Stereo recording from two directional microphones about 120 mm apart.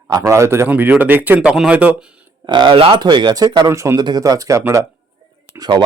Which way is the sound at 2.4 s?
40° right (ahead or behind).